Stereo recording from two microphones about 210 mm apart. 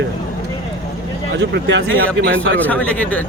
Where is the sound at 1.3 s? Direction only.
55° right (ahead or behind).